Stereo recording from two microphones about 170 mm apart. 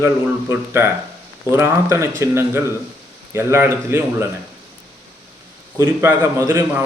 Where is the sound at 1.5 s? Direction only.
15° right (ahead or behind).